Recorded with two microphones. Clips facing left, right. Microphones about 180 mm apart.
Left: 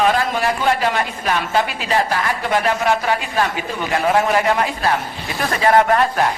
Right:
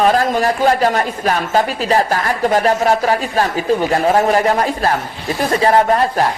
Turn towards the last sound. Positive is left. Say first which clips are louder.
# right 1 dB
turn(degrees=-30)  # may be behind; listen again after turning